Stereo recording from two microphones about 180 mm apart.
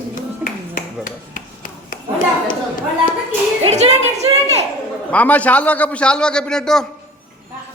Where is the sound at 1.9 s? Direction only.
50° left (ahead or behind).